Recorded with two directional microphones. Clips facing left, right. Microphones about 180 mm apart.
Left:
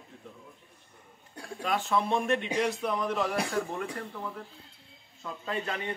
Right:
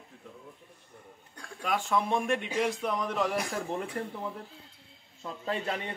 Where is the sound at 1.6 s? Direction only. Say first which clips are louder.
Even; 10° right (ahead or behind).